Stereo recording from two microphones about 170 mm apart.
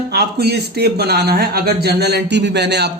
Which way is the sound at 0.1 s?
70° right (ahead or behind).